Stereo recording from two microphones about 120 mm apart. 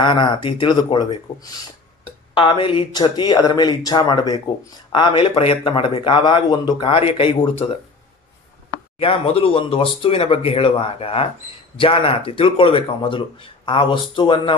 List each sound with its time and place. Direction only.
0.0 s a man's voice: 40° left (ahead or behind)
9.0 s a man's voice: 50° left (ahead or behind)